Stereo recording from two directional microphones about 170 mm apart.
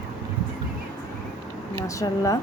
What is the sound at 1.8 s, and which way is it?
Speech, 20° left (ahead or behind).